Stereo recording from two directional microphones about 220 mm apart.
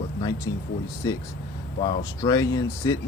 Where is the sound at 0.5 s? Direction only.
60° left (ahead or behind).